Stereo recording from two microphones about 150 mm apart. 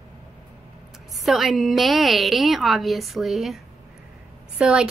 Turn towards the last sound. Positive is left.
turn(degrees=-5)  # may be behind; listen again after turning